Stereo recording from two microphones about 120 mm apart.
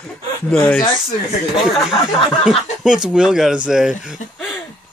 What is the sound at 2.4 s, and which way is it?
Speech, 5° right (ahead or behind).